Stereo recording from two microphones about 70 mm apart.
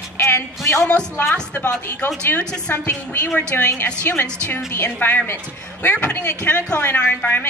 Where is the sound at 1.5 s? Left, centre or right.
Left.